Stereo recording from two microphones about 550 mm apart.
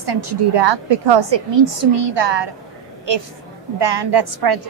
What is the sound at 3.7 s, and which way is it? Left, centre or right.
Speech, right.